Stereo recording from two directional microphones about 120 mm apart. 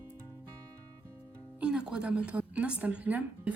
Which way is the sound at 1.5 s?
5° right (ahead or behind).